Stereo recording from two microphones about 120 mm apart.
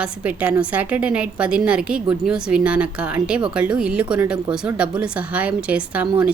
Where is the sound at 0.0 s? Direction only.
10° right (ahead or behind).